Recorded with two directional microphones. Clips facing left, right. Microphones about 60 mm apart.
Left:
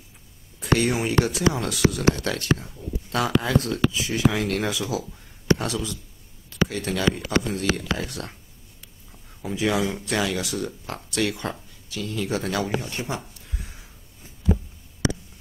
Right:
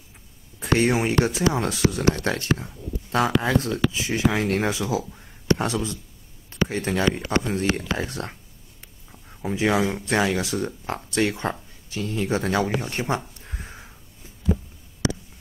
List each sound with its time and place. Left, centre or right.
0.6 s speech: right
9.4 s speech: right
13.5 s a sound: right